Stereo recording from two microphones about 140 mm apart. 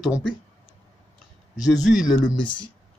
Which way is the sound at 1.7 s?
Centre (ahead or behind).